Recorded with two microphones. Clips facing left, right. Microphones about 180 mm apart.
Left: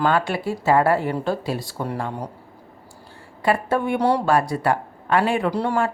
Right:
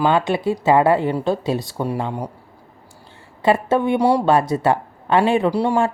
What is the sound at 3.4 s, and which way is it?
Speech, 20° right (ahead or behind).